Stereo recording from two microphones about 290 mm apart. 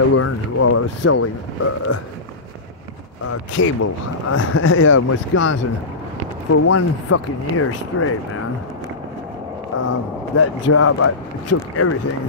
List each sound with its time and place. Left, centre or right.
0.1 s speech: left
3.5 s speech: left
10.3 s speech: left